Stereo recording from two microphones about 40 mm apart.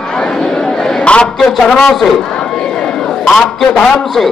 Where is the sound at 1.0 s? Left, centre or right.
Left.